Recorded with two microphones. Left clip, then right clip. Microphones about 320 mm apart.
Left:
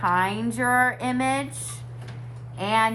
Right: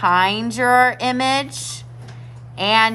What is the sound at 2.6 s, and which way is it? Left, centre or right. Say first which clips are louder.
Speech: right 7 dB; right.